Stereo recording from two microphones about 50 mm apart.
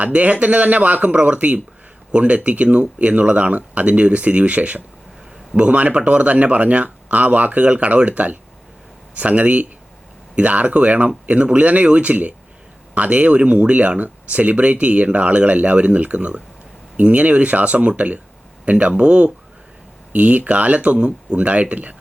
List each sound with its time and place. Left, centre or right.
0.0 s speech: right